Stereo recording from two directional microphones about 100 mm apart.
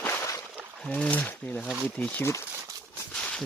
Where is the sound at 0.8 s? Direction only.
10° left (ahead or behind).